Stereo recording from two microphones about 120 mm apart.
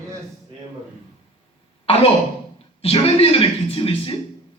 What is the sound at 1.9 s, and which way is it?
Cough, 50° left (ahead or behind).